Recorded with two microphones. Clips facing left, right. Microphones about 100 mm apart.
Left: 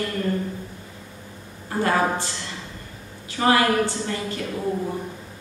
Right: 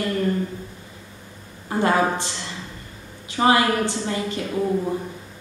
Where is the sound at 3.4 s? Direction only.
20° right (ahead or behind).